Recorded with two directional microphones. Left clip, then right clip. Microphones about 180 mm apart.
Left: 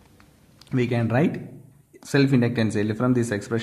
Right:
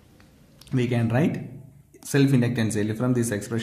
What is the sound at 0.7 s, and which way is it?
A man's voice, 30° left (ahead or behind).